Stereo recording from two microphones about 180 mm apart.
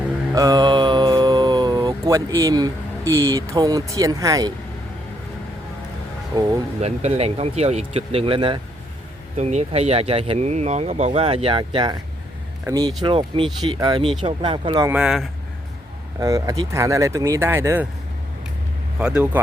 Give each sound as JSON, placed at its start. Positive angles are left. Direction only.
{"t": 0.3, "sound": "mantra", "side_deg": -20}
{"t": 6.3, "sound": "speech", "side_deg": -20}
{"t": 6.8, "sound": "speech", "side_deg": -35}
{"t": 14.8, "sound": "speech", "side_deg": -5}
{"t": 16.2, "sound": "speech", "side_deg": -15}
{"t": 18.9, "sound": "speech", "side_deg": -5}